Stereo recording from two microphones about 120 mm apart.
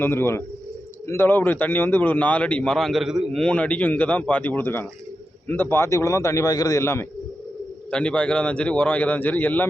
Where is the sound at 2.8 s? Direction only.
Centre (ahead or behind).